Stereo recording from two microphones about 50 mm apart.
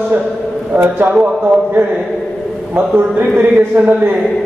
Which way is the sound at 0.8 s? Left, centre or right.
Right.